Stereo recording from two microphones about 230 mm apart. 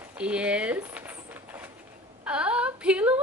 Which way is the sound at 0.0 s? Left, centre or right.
Centre.